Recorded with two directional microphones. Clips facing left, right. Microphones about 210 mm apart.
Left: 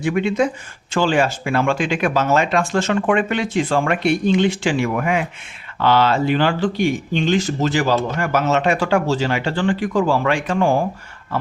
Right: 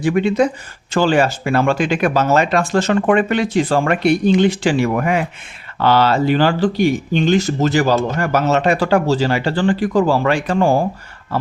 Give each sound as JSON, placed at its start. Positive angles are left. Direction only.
{"t": 0.0, "sound": "speech", "side_deg": -35}